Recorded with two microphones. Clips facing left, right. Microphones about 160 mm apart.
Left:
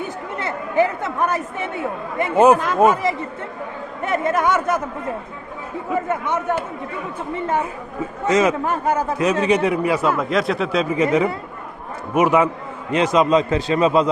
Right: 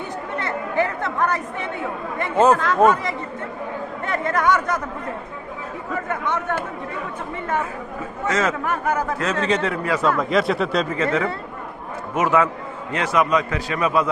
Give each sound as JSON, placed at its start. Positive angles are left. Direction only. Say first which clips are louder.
{"t": 0.3, "sound": "chatter", "louder": "left 3 dB", "side_deg": 20}
{"t": 2.1, "sound": "a man's voice", "louder": "left 3 dB", "side_deg": 20}
{"t": 5.9, "sound": "a man's voice", "louder": "left 3 dB", "side_deg": 20}
{"t": 8.6, "sound": "a man's voice", "louder": "left 2 dB", "side_deg": 30}
{"t": 9.1, "sound": "a man's voice", "louder": "left 4 dB", "side_deg": 15}
{"t": 10.2, "sound": "speech", "louder": "even", "side_deg": 0}
{"t": 10.8, "sound": "a man's voice", "louder": "left 4 dB", "side_deg": 15}